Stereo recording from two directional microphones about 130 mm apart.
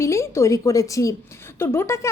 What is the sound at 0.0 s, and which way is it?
A woman's voice, 20° left (ahead or behind).